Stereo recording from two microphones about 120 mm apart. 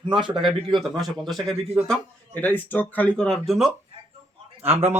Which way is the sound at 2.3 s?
15° left (ahead or behind).